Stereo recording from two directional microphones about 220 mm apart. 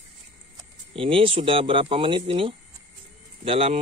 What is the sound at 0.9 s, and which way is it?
Speech, 25° right (ahead or behind).